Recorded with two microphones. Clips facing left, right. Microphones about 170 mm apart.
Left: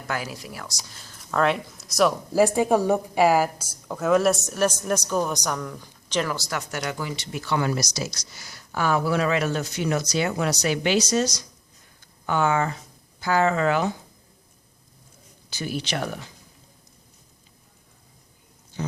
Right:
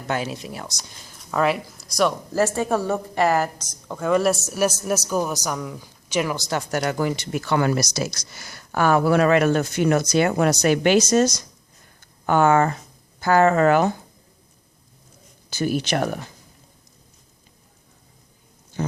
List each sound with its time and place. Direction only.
0.1 s speech: 25° right (ahead or behind)
0.9 s a woman's voice: 10° right (ahead or behind)
2.4 s a woman's voice: 15° left (ahead or behind); by 6.6 s 20° right (ahead or behind)
6.6 s speech: 40° right (ahead or behind)
6.8 s speech: 50° right (ahead or behind)
15.4 s speech: 45° right (ahead or behind)
18.8 s a sound: 50° right (ahead or behind)